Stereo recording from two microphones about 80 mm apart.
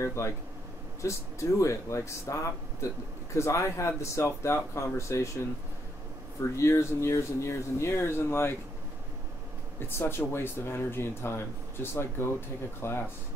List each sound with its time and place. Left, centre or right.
0.0 s speech: left
3.3 s speech: left
6.5 s speech: left
9.8 s speech: left